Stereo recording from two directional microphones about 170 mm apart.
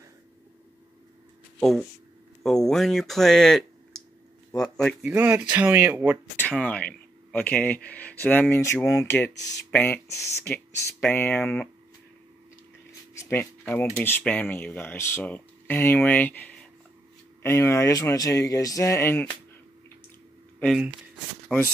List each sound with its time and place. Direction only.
1.6 s speech: centre (ahead or behind)
5.1 s speech: 10° right (ahead or behind)
6.5 s speech: 10° left (ahead or behind)
13.1 s speech: 15° left (ahead or behind)
20.5 s speech: centre (ahead or behind)